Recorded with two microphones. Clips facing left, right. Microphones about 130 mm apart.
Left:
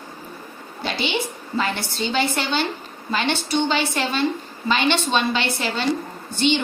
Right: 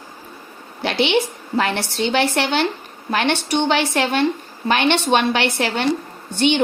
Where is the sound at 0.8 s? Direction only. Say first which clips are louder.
Right 7 dB; 70° right (ahead or behind).